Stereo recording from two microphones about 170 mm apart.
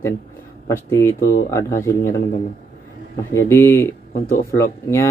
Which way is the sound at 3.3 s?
15° left (ahead or behind).